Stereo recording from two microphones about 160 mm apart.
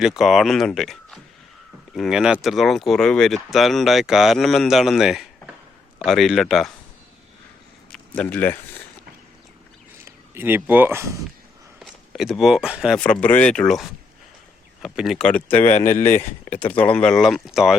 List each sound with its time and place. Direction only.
0.0 s speech: centre (ahead or behind)
7.9 s speech: 10° left (ahead or behind)
10.3 s speech: 15° right (ahead or behind)
11.8 s speech: centre (ahead or behind)
13.0 s speech: 5° left (ahead or behind)
14.9 s speech: centre (ahead or behind)
15.6 s speech: 50° left (ahead or behind)
16.1 s speech: 10° left (ahead or behind)